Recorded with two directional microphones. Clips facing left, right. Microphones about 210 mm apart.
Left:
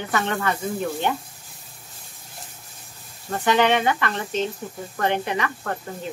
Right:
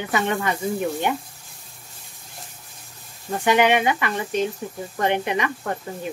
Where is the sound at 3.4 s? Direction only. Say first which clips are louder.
Right 1 dB; 10° right (ahead or behind).